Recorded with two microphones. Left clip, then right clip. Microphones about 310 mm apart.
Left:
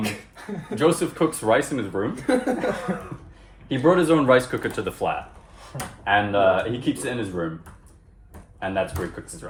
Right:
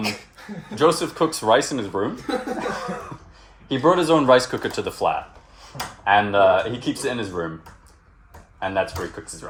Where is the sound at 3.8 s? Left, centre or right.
Right.